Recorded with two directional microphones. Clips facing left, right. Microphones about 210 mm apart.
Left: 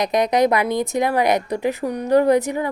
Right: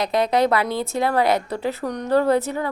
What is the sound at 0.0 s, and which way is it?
A woman's voice, 15° left (ahead or behind).